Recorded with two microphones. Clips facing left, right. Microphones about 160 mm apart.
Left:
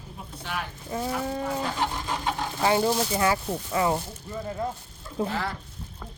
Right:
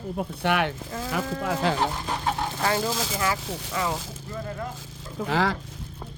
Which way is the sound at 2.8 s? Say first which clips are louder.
Left 3 dB; 90° right.